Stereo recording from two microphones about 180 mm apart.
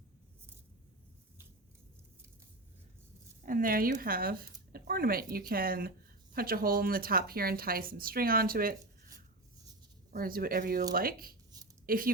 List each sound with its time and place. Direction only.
3.4 s speech: 50° right (ahead or behind)
10.1 s speech: 55° right (ahead or behind)